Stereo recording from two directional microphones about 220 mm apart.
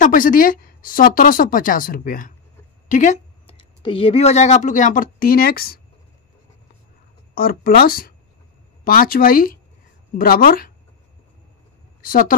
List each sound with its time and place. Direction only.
0.0 s speech: 40° left (ahead or behind)
7.3 s speech: 40° left (ahead or behind)
12.0 s a woman's voice: 40° left (ahead or behind)